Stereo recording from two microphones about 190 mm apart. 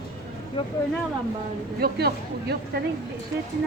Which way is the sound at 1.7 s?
55° right (ahead or behind).